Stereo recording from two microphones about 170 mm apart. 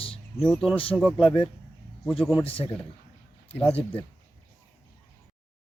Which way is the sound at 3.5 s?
10° left (ahead or behind).